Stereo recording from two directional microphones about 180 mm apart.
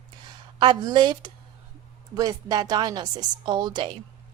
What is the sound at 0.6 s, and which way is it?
Speech, 25° right (ahead or behind).